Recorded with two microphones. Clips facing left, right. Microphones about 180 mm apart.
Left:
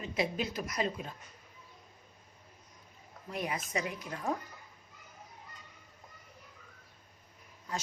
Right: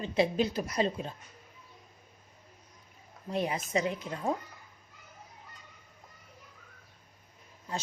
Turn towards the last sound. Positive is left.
turn(degrees=-25)  # may be behind; listen again after turning